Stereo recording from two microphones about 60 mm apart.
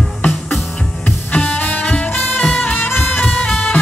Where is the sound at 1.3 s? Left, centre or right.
Left.